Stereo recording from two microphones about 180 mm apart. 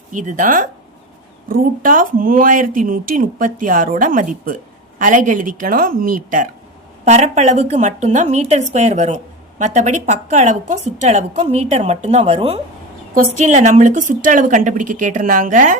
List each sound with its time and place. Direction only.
0.1 s a woman's voice: 45° right (ahead or behind)